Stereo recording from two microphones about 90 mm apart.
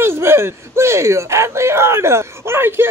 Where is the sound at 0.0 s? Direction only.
30° right (ahead or behind).